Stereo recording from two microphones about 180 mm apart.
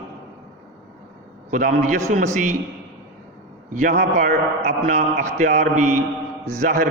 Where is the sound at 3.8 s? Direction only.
45° right (ahead or behind).